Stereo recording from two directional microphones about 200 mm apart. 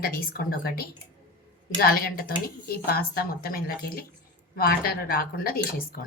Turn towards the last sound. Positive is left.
turn(degrees=50)  # may be behind; listen again after turning